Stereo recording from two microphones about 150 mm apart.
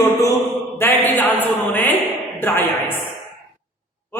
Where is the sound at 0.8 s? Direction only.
10° left (ahead or behind).